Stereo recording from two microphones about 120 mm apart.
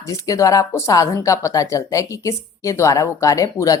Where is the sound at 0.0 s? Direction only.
25° left (ahead or behind).